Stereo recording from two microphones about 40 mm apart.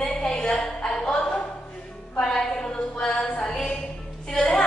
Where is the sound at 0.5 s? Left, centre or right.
Centre.